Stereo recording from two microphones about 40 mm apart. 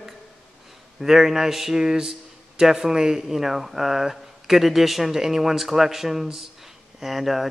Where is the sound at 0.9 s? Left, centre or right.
Centre.